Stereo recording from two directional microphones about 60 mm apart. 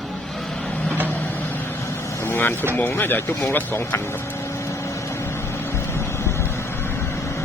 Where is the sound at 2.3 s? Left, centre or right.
Left.